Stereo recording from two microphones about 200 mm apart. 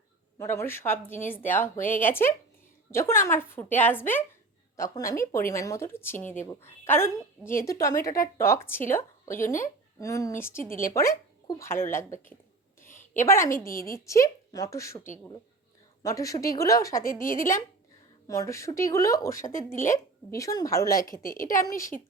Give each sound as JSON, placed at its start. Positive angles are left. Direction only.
{"t": 0.3, "sound": "a woman's voice", "side_deg": 10}
{"t": 10.6, "sound": "a woman's voice", "side_deg": 45}
{"t": 10.9, "sound": "a woman's voice", "side_deg": 15}
{"t": 12.8, "sound": "a sound", "side_deg": 40}
{"t": 13.1, "sound": "a woman's voice", "side_deg": 15}
{"t": 13.7, "sound": "a woman's voice", "side_deg": 45}
{"t": 14.1, "sound": "a woman's voice", "side_deg": 15}
{"t": 16.0, "sound": "a woman's voice", "side_deg": 15}
{"t": 17.0, "sound": "a woman's voice", "side_deg": 45}
{"t": 18.3, "sound": "a woman's voice", "side_deg": 15}
{"t": 21.0, "sound": "a woman's voice", "side_deg": 45}
{"t": 21.6, "sound": "a woman's voice", "side_deg": 15}